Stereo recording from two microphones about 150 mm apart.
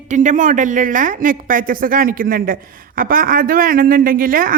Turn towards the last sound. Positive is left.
turn(degrees=-65)  # may be behind; listen again after turning